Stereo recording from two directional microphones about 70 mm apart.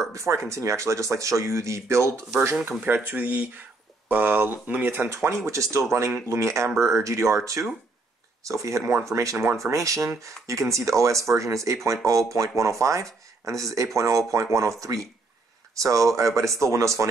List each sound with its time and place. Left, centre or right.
0.1 s speech: right
2.8 s speech: right
5.1 s speech: right